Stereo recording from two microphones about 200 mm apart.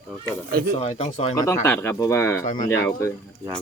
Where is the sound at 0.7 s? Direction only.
30° left (ahead or behind).